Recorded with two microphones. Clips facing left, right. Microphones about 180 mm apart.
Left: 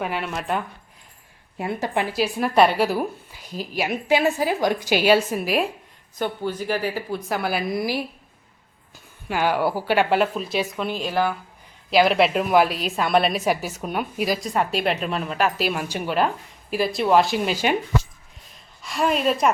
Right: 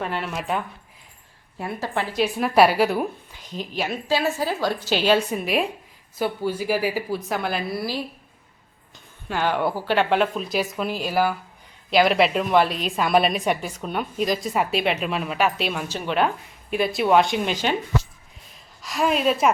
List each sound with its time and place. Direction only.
0.0 s a woman's voice: 5° left (ahead or behind)
1.5 s a woman's voice: 15° left (ahead or behind)
2.1 s a woman's voice: centre (ahead or behind)
7.6 s a woman's voice: 15° left (ahead or behind)
9.3 s a woman's voice: 10° left (ahead or behind)
18.8 s a woman's voice: centre (ahead or behind)